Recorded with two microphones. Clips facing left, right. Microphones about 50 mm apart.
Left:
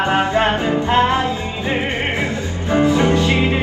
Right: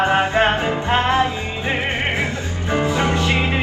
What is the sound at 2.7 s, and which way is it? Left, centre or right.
Music, right.